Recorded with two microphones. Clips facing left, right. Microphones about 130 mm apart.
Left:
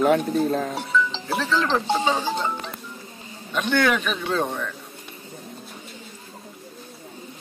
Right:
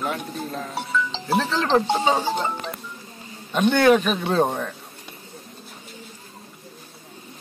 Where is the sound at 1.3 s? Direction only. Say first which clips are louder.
Right 3 dB; 30° right (ahead or behind).